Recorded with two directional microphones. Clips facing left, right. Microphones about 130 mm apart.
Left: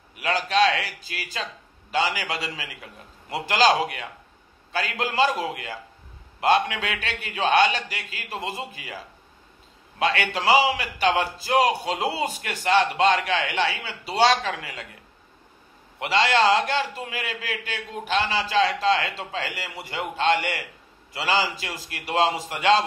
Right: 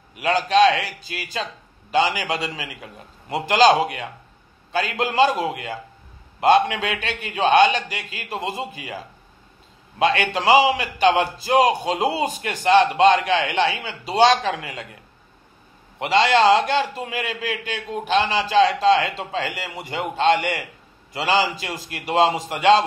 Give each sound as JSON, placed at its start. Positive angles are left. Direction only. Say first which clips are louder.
{"t": 0.2, "sound": "a man's voice", "louder": "right 5 dB", "side_deg": -25}
{"t": 16.0, "sound": "a man's voice", "louder": "right 4 dB", "side_deg": -20}